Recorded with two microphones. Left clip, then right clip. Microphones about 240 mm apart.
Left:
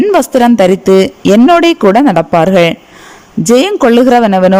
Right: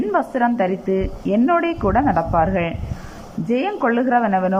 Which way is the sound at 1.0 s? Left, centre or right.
Left.